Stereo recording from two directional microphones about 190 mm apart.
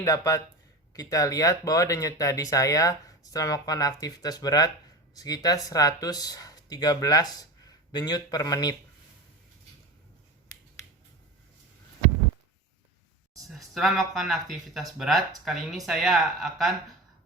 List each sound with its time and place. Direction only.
0.0 s speech: 15° left (ahead or behind)
13.5 s speech: centre (ahead or behind)